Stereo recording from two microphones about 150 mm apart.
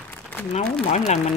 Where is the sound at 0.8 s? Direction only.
50° left (ahead or behind).